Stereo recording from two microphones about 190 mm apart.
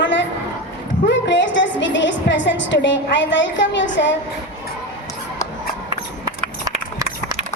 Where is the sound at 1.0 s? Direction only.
70° left (ahead or behind).